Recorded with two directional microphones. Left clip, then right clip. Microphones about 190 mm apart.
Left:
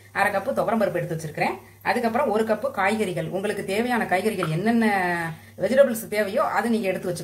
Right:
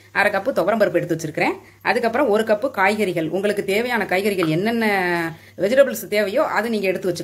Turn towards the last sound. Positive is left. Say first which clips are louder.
# right 3 dB
turn(degrees=-35)  # may be behind; listen again after turning